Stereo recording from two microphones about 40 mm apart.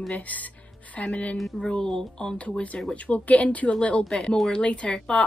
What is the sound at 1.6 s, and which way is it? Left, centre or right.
Speech, centre.